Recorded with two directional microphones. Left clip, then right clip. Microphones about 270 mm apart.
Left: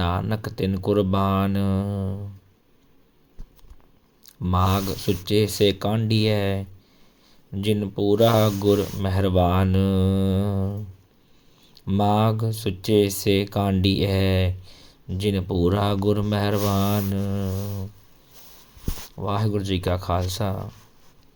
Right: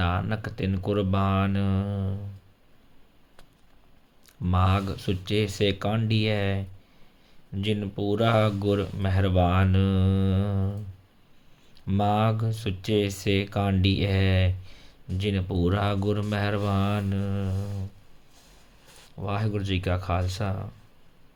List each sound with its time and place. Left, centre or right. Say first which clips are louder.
0.0 s speech: left 3 dB; centre
4.3 s speech: left 4 dB; centre
19.1 s speech: left 5 dB; centre